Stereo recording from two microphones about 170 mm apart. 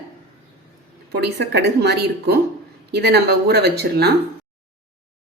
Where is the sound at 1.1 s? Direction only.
70° right (ahead or behind).